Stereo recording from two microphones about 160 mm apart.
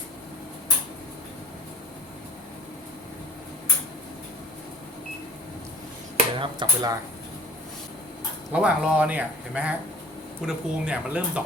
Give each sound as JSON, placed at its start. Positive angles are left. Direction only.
{"t": 6.1, "sound": "speech", "side_deg": -30}
{"t": 8.5, "sound": "speech", "side_deg": -5}